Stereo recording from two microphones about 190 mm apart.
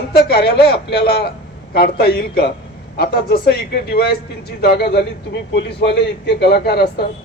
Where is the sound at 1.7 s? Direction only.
55° left (ahead or behind).